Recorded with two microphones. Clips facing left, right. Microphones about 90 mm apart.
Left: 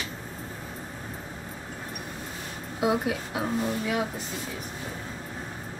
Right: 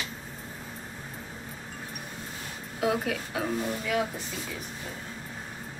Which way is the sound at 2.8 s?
20° left (ahead or behind).